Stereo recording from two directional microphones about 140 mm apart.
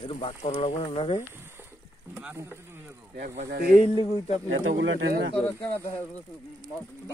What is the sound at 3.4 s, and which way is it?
Speech, 90° right.